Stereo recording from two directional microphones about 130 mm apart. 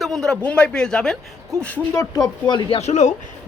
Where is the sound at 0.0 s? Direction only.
5° left (ahead or behind).